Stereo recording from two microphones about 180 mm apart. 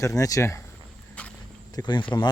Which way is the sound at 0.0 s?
20° left (ahead or behind).